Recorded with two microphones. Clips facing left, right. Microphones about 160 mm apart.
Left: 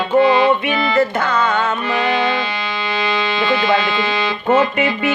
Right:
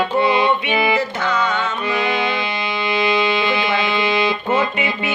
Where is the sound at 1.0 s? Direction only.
55° left (ahead or behind).